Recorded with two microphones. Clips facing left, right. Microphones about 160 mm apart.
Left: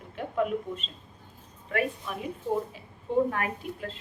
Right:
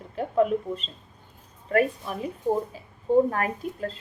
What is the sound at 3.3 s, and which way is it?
Speech, 40° right (ahead or behind).